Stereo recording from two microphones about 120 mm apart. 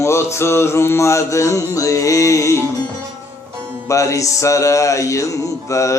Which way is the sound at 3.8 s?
25° left (ahead or behind).